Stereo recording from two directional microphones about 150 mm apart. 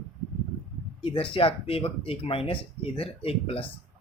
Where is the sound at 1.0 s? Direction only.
40° left (ahead or behind).